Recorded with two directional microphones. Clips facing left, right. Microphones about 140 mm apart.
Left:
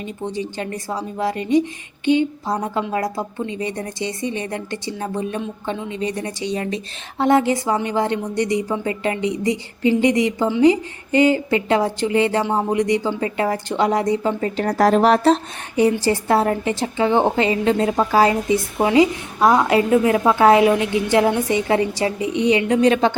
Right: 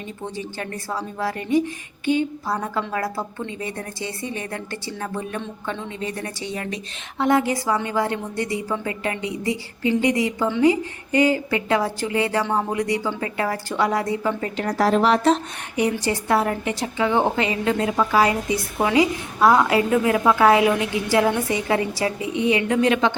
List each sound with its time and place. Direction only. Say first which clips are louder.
0.3 s a woman's voice: left 5 dB; 15° left (ahead or behind)
14.5 s a woman's voice: left 4 dB; 40° left (ahead or behind)